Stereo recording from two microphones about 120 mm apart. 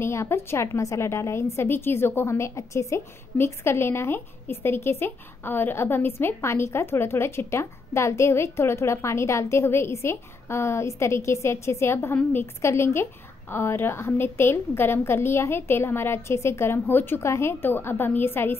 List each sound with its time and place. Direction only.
0.0 s a woman's voice: 20° left (ahead or behind)